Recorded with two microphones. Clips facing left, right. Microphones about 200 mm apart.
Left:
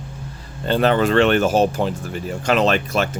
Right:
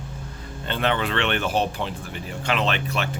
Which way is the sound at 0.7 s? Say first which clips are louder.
Left 8 dB; 40° left (ahead or behind).